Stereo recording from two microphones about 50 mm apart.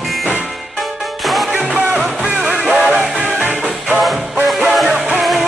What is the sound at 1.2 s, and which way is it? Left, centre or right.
Music, centre.